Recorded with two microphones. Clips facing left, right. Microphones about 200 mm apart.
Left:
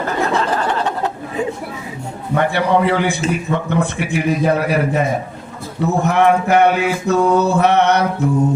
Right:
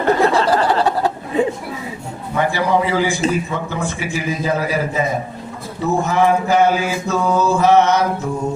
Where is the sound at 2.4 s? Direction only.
65° left (ahead or behind).